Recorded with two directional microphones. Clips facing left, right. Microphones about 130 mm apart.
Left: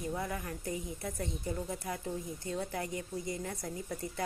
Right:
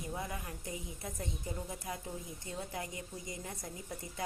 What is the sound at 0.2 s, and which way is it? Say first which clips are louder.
A woman's voice: left 4 dB; 20° right (ahead or behind).